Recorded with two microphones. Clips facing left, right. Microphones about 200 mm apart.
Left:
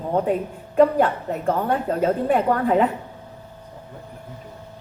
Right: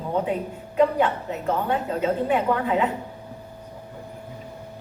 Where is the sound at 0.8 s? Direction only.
45° left (ahead or behind).